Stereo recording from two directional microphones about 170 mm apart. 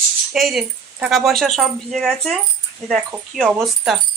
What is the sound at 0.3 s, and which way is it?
A woman's voice, centre (ahead or behind).